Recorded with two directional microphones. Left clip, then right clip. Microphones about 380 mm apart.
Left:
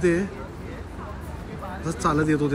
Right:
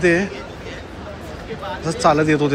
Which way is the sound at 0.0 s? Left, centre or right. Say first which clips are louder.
Right 6 dB; centre.